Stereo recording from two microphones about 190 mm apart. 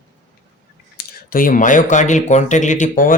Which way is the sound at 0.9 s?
50° left (ahead or behind).